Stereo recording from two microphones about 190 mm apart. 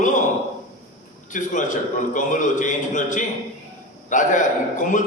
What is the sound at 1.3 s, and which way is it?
A man's voice, 40° left (ahead or behind).